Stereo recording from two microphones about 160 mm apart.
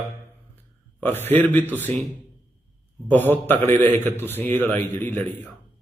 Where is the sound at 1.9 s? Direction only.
40° right (ahead or behind).